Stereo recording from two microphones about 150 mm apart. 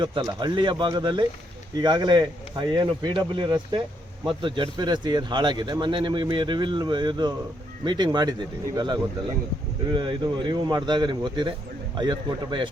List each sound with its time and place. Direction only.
0.0 s speech: 35° right (ahead or behind)